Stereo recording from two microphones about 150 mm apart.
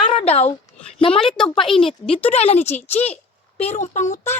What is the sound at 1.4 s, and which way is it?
Speech, centre (ahead or behind).